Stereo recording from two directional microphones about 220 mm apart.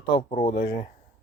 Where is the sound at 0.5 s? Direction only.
45° left (ahead or behind).